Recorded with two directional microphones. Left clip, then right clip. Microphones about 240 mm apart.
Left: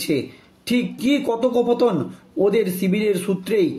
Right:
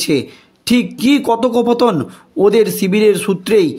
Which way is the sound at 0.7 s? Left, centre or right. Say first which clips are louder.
Right 7 dB; right.